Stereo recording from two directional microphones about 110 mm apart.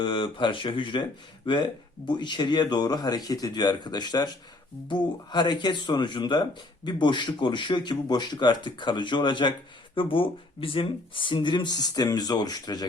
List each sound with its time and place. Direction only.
0.0 s speech: 50° left (ahead or behind)